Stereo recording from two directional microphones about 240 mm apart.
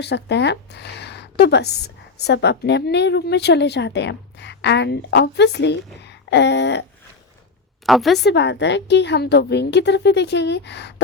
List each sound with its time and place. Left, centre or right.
0.0 s a woman's voice: left
7.9 s a woman's voice: centre
8.2 s a woman's voice: left